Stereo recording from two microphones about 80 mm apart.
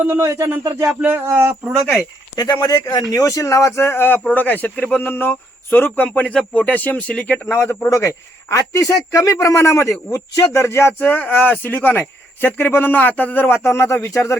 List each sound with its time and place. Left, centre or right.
0.0 s speech: right
1.0 s speech: right
2.3 s speech: left; by 7.4 s centre
7.5 s speech: left
7.9 s speech: left